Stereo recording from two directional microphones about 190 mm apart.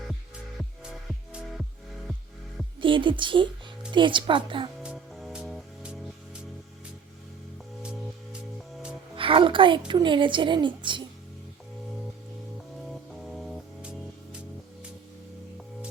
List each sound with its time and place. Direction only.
1.0 s music: 5° right (ahead or behind)
2.8 s a woman's voice: 25° right (ahead or behind)
4.8 s music: 5° right (ahead or behind)
7.8 s music: 5° right (ahead or behind)
9.1 s a woman's voice: 25° right (ahead or behind)
13.1 s music: centre (ahead or behind)